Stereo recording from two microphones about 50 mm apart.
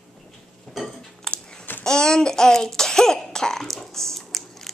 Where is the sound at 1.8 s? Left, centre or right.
Centre.